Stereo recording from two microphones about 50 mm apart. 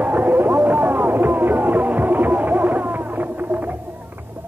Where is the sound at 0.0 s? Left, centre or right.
Right.